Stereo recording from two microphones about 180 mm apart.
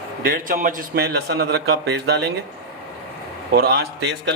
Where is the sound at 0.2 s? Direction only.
55° right (ahead or behind).